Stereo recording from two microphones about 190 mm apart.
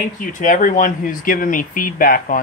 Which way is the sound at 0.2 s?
45° left (ahead or behind).